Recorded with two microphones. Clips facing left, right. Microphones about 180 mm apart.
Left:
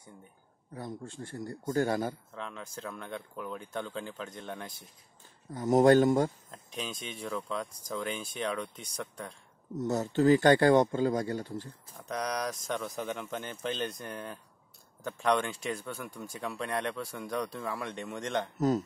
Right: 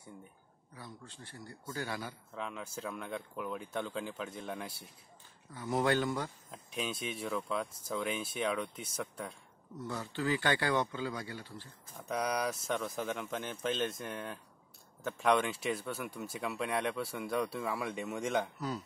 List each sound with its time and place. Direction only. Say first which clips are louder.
0.7 s speech: left 10 dB; 45° left (ahead or behind)
2.3 s speech: even; 5° right (ahead or behind)
5.5 s speech: left 10 dB; 45° left (ahead or behind)
6.5 s speech: right 1 dB; 5° right (ahead or behind)
9.8 s speech: left 11 dB; 45° left (ahead or behind)
12.0 s speech: even; 5° right (ahead or behind)